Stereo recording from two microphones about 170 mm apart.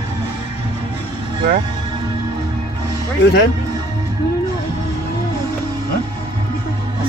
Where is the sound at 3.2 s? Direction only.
80° left.